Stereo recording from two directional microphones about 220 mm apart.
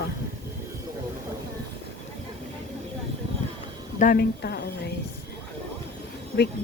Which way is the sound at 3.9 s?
40° left (ahead or behind).